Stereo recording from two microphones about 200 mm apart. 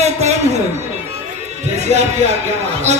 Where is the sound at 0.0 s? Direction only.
35° right (ahead or behind).